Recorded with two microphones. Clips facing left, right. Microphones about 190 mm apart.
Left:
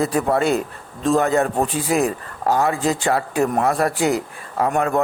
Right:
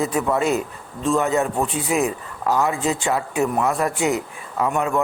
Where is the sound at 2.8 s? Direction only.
35° left (ahead or behind).